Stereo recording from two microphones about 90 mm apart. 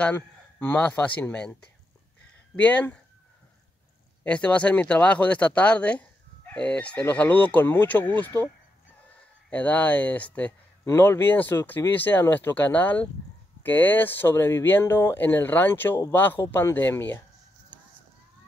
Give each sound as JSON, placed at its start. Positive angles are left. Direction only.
{"t": 0.0, "sound": "speech", "side_deg": 20}
{"t": 2.5, "sound": "speech", "side_deg": 15}
{"t": 4.2, "sound": "speech", "side_deg": 15}
{"t": 9.5, "sound": "speech", "side_deg": 15}